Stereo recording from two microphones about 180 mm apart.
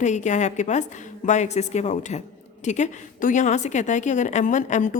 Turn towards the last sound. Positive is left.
turn(degrees=45)  # may be behind; listen again after turning